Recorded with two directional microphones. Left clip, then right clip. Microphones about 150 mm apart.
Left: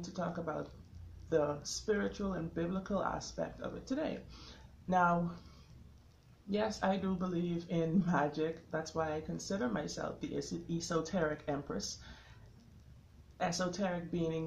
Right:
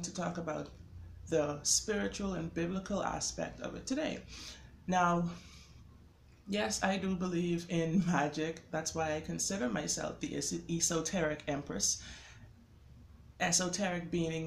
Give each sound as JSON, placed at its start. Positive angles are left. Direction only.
{"t": 0.0, "sound": "speech", "side_deg": -10}
{"t": 6.5, "sound": "speech", "side_deg": -10}
{"t": 13.4, "sound": "speech", "side_deg": -10}